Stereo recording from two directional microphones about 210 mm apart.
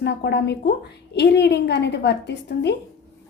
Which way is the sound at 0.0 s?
55° left (ahead or behind).